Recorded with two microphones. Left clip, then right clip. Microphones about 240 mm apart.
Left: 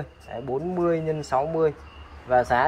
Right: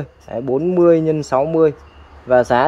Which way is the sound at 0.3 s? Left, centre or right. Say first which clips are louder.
Right 10 dB; right.